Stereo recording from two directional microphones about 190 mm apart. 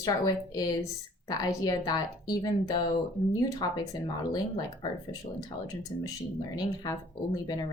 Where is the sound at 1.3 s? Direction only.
20° left (ahead or behind).